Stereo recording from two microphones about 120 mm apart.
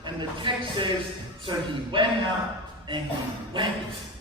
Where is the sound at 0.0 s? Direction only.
40° right (ahead or behind).